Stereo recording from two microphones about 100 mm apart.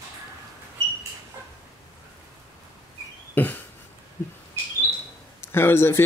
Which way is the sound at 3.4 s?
20° left (ahead or behind).